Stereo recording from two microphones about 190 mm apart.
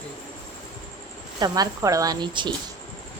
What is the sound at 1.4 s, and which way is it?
Speech, 20° right (ahead or behind).